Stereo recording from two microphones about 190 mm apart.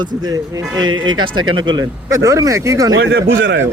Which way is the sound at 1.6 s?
25° right (ahead or behind).